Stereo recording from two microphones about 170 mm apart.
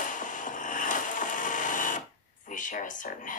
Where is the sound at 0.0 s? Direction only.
50° left (ahead or behind).